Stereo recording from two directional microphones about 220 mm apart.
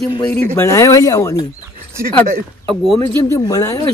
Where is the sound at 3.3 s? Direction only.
15° left (ahead or behind).